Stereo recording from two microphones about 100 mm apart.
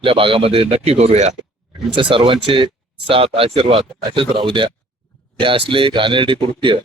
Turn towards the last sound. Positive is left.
turn(degrees=-55)  # may be behind; listen again after turning